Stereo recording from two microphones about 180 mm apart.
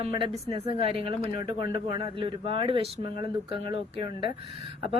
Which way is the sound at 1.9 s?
30° right (ahead or behind).